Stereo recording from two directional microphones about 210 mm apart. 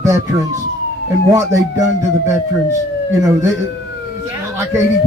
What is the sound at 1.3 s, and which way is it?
Speech, 15° right (ahead or behind).